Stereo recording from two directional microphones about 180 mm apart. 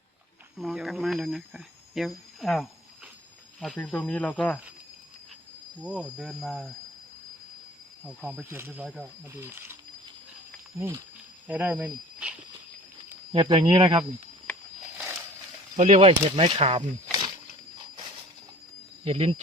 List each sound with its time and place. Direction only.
0.5 s speech: centre (ahead or behind)
5.8 s speech: 5° right (ahead or behind)
8.0 s speech: 5° right (ahead or behind)
10.8 s speech: 15° right (ahead or behind)
13.3 s speech: 30° right (ahead or behind)
15.7 s speech: 35° right (ahead or behind)
17.1 s a sound: 25° right (ahead or behind)
17.7 s train: 30° right (ahead or behind)
19.0 s speech: 35° right (ahead or behind)